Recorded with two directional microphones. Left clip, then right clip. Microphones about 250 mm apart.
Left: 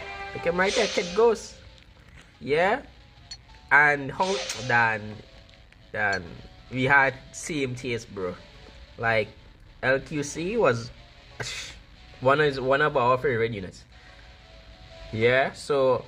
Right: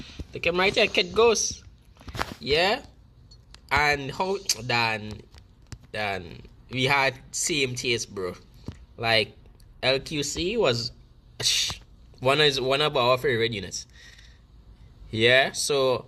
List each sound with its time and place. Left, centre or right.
0.5 s a man's voice: centre
2.5 s a man's voice: centre
15.1 s a man's voice: centre